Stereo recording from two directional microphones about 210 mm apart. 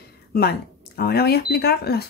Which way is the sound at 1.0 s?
50° left (ahead or behind).